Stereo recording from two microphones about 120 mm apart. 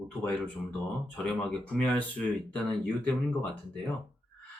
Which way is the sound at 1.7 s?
10° left (ahead or behind).